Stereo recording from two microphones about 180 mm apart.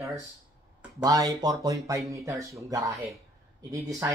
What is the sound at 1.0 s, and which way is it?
Speech, 20° right (ahead or behind).